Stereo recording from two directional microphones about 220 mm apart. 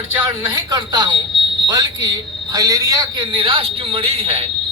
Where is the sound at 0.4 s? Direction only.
20° right (ahead or behind).